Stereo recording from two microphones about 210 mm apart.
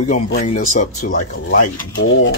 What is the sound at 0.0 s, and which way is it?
Speech, 35° left (ahead or behind).